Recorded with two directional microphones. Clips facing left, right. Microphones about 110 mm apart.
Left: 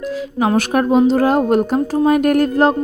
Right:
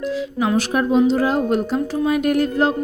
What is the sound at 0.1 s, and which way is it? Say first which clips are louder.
Speech: left 4 dB; 50° left (ahead or behind).